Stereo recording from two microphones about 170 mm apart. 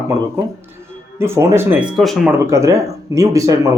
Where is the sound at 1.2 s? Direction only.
15° right (ahead or behind).